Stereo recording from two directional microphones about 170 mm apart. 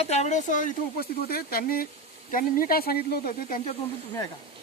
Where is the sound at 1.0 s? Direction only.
65° left (ahead or behind).